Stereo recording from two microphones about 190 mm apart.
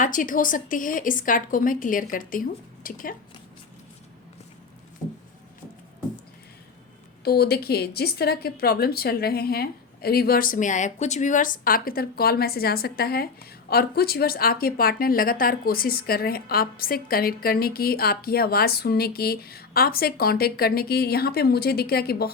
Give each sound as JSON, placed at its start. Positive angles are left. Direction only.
{"t": 0.0, "sound": "a woman's voice", "side_deg": 45}
{"t": 7.3, "sound": "a woman's voice", "side_deg": 55}